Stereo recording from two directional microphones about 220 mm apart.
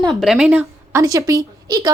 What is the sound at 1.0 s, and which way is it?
Speech, 15° right (ahead or behind).